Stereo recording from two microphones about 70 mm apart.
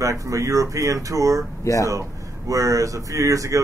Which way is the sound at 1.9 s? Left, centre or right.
Right.